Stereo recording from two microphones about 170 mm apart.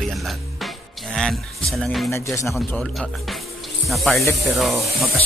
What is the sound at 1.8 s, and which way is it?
Speech, centre (ahead or behind).